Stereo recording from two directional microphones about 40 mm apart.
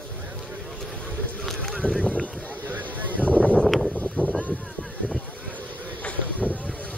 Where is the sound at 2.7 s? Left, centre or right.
Right.